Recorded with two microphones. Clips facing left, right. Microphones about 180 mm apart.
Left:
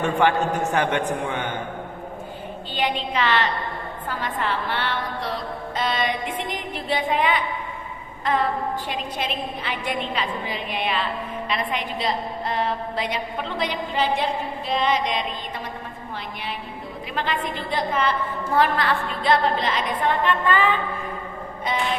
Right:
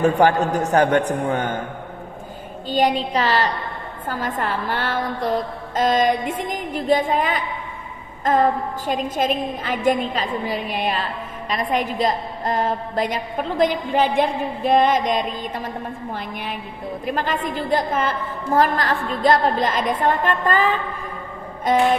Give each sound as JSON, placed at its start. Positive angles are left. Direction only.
{"t": 0.0, "sound": "a man's voice", "side_deg": -40}
{"t": 2.7, "sound": "a man's voice", "side_deg": -40}
{"t": 8.2, "sound": "a sound", "side_deg": -45}
{"t": 8.9, "sound": "a woman's voice", "side_deg": -45}
{"t": 17.1, "sound": "a woman's voice", "side_deg": -45}